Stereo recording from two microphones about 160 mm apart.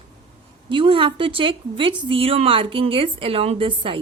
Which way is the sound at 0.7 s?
30° right (ahead or behind).